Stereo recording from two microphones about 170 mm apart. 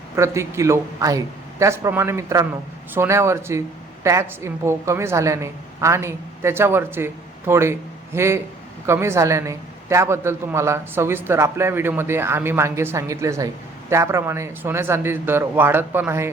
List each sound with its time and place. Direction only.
0.2 s a woman's voice: 15° right (ahead or behind)